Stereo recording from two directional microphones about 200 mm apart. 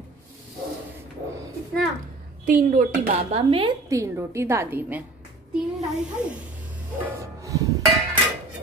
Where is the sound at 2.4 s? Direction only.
45° right (ahead or behind).